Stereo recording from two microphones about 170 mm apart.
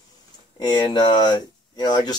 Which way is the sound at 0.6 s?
25° left (ahead or behind).